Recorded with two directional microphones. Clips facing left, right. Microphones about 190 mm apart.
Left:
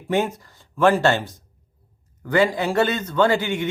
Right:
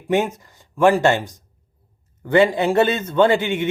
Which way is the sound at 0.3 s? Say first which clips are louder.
Right 2 dB; 20° right (ahead or behind).